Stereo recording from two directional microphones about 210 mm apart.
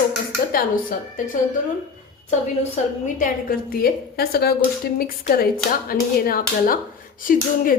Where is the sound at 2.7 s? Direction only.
40° left (ahead or behind).